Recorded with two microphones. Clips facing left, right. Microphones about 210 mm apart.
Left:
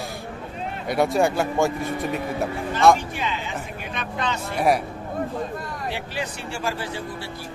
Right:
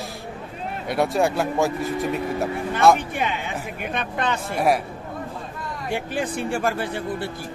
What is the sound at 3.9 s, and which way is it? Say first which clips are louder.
Speech: right 2 dB; 55° right (ahead or behind).